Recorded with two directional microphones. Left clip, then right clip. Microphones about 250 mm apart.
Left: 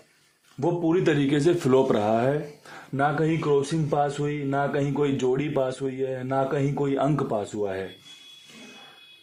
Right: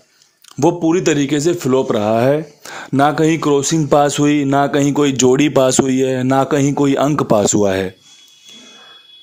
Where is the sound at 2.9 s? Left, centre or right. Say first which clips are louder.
Right 11 dB; right.